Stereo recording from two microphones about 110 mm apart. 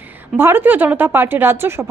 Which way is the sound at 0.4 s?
20° right (ahead or behind).